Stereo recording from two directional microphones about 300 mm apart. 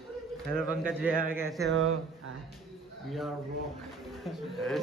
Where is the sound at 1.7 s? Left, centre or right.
Right.